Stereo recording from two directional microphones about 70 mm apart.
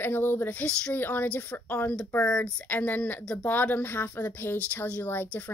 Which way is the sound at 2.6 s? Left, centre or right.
Left.